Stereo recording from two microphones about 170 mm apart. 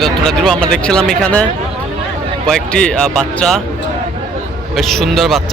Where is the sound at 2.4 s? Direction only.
5° left (ahead or behind).